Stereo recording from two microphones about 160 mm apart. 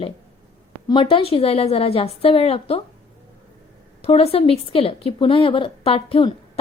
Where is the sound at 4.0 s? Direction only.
40° left (ahead or behind).